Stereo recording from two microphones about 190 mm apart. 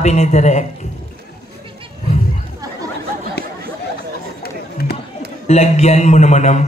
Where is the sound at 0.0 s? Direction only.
35° left (ahead or behind).